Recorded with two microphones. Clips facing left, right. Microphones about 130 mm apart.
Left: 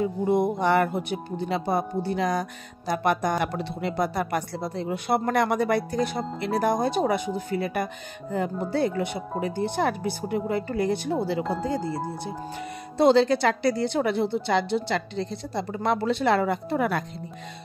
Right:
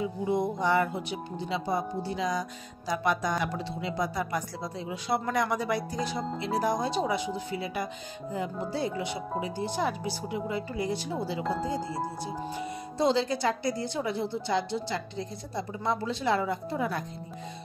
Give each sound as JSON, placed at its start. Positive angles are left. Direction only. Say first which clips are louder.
{"t": 0.0, "sound": "speech", "louder": "left 5 dB", "side_deg": 55}
{"t": 11.4, "sound": "speech", "louder": "left 3 dB", "side_deg": 0}
{"t": 12.9, "sound": "speech", "louder": "left 8 dB", "side_deg": 65}